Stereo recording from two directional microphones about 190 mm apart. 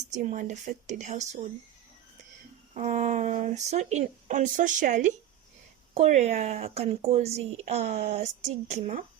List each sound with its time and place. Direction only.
0.1 s a woman's voice: 40° right (ahead or behind)
2.7 s a woman's voice: 40° right (ahead or behind)